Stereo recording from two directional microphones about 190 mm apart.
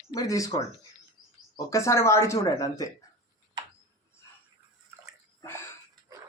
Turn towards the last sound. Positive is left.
turn(degrees=15)  # may be behind; listen again after turning